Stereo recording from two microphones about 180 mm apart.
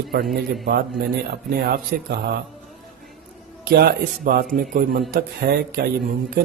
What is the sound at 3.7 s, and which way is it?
A man's voice, 55° right (ahead or behind).